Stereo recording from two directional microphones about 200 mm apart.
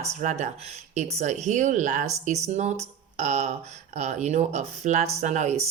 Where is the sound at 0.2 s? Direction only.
35° right (ahead or behind).